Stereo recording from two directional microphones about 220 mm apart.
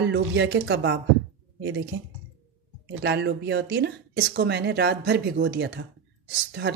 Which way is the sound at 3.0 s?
50° right (ahead or behind).